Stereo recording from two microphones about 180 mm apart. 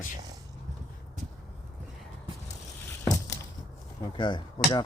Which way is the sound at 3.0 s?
15° left (ahead or behind).